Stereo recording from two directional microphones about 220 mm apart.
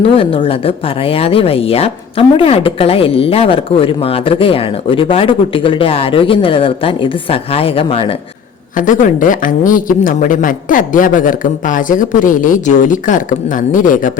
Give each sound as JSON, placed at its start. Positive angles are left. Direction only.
{"t": 0.0, "sound": "a woman's voice", "side_deg": 25}
{"t": 8.7, "sound": "a woman's voice", "side_deg": 35}